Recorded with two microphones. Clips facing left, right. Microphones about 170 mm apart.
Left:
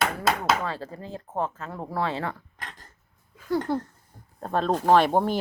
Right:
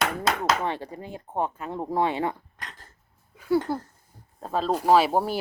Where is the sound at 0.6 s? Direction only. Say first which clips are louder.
Right 2 dB; 15° right (ahead or behind).